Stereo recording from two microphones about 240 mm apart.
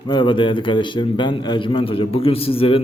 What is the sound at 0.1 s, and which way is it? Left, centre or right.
A man's voice, centre.